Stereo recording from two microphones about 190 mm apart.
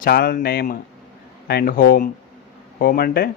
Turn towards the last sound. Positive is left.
turn(degrees=55)  # may be behind; listen again after turning